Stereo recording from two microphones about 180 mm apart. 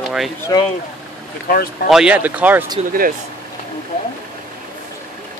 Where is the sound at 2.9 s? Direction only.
50° right (ahead or behind).